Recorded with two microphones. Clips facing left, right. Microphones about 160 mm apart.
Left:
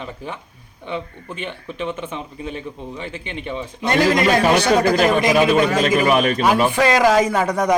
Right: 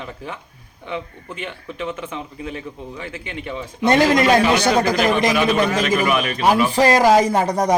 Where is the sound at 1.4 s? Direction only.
25° left (ahead or behind).